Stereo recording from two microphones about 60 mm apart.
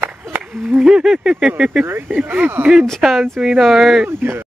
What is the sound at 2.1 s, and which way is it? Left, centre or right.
Speech, right.